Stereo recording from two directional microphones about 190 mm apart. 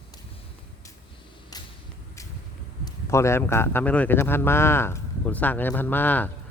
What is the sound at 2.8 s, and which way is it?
Speech, 15° left (ahead or behind).